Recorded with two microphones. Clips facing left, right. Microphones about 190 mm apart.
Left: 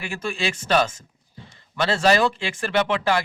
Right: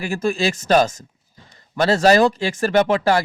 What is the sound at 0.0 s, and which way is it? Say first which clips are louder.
A man's voice: right 7 dB; 40° right (ahead or behind).